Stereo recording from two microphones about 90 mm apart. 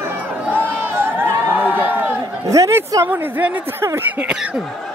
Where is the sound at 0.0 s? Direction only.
20° right (ahead or behind).